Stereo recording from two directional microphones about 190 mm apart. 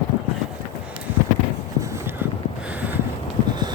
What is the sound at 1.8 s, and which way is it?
Clip-clop, 15° right (ahead or behind).